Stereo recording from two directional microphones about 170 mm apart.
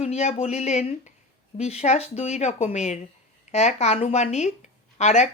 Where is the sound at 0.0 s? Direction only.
40° left (ahead or behind).